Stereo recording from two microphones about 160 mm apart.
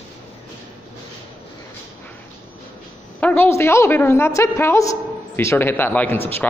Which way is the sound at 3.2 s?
15° left (ahead or behind).